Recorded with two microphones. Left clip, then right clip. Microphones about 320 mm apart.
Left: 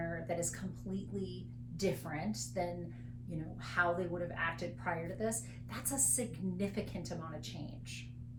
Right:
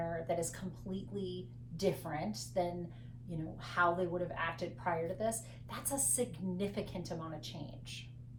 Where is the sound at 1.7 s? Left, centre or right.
Centre.